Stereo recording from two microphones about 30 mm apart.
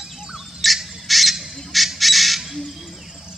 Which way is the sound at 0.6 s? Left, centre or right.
Centre.